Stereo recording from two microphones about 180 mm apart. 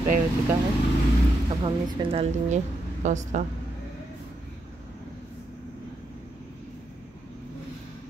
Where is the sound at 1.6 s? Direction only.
30° right (ahead or behind).